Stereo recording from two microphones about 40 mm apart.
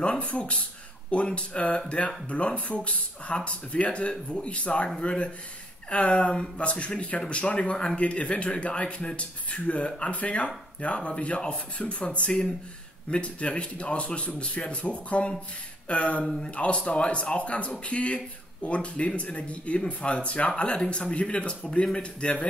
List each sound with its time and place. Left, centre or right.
0.2 s speech: left